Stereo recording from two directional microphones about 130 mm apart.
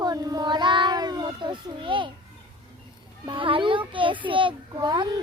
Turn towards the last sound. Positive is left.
turn(degrees=-35)  # may be behind; listen again after turning